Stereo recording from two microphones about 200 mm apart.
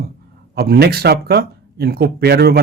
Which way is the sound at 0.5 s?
50° right (ahead or behind).